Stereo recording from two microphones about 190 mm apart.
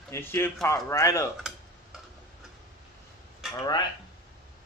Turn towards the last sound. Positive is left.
turn(degrees=20)  # may be behind; listen again after turning